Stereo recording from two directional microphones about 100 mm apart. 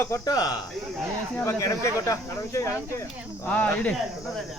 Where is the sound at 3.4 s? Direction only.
15° left (ahead or behind).